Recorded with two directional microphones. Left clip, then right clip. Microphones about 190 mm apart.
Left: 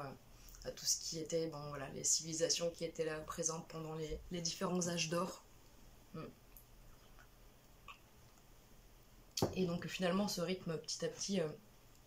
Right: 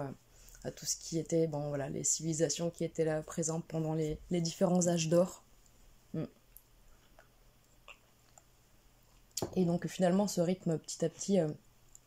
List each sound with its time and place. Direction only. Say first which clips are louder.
0.6 s speech: even; 40° right (ahead or behind)
9.3 s speech: right 4 dB; 35° right (ahead or behind)